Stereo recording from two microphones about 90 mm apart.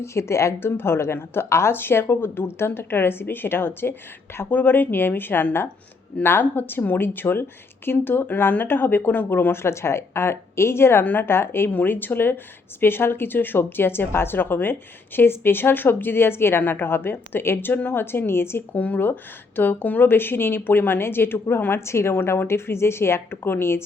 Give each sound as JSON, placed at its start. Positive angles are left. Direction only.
{"t": 0.0, "sound": "speech", "side_deg": 30}